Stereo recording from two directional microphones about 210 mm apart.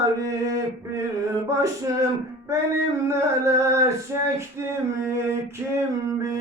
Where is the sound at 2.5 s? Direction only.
15° right (ahead or behind).